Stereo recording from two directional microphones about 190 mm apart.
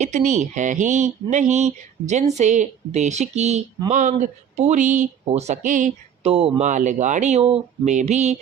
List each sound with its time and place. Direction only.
0.0 s speech: 40° right (ahead or behind)